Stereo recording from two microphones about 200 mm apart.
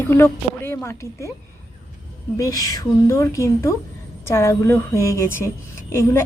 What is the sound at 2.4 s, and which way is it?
A woman's voice, 15° left (ahead or behind).